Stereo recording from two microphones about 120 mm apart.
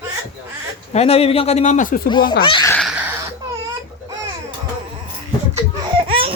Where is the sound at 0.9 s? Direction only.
60° left (ahead or behind); by 1.8 s 80° left.